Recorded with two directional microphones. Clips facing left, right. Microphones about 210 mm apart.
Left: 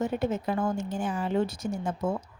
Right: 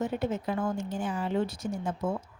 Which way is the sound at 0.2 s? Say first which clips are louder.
Left 2 dB; 45° left (ahead or behind).